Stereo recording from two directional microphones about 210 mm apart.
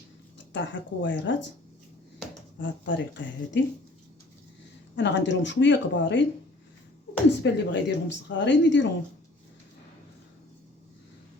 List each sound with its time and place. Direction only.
0.5 s speech: 60° left (ahead or behind)
2.6 s speech: 60° left (ahead or behind)
4.9 s speech: 60° left (ahead or behind)
7.4 s speech: 55° left (ahead or behind)